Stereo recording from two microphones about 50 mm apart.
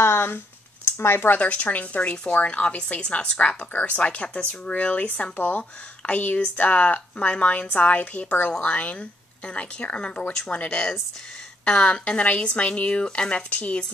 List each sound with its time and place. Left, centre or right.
0.0 s a sound: left
0.8 s speech: left
1.4 s a woman's voice: left